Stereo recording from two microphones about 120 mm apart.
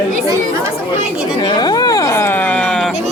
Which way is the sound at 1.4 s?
35° left (ahead or behind).